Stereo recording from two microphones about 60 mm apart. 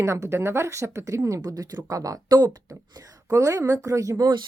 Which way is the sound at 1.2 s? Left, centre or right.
Right.